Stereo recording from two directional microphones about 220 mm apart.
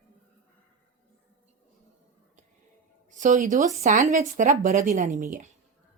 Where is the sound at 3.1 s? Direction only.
35° right (ahead or behind).